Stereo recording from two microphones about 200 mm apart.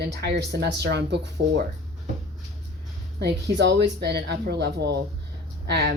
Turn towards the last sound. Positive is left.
turn(degrees=-55)  # may be behind; listen again after turning